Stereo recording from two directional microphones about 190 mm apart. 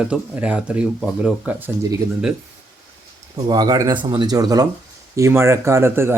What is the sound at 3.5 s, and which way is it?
Speech, 20° right (ahead or behind).